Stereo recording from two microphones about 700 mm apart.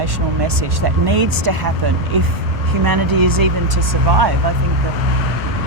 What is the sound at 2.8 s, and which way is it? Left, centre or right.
Speech, right.